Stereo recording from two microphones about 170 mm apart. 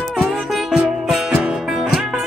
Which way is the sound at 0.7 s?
5° right (ahead or behind).